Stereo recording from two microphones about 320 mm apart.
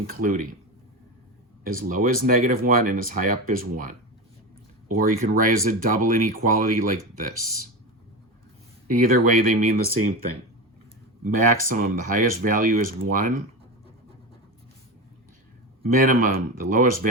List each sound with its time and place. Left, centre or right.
0.1 s speech: right
1.6 s speech: right
8.9 s speech: right
11.7 s speech: right
15.8 s speech: right